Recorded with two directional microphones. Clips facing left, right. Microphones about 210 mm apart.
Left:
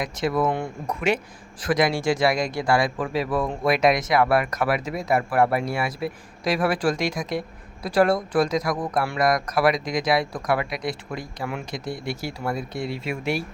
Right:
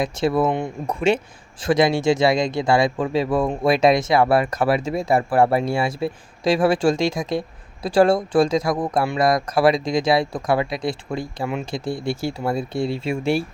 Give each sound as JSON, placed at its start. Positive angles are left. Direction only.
{"t": 0.0, "sound": "speech", "side_deg": -30}